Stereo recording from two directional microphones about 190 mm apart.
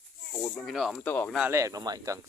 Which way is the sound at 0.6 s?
Centre (ahead or behind).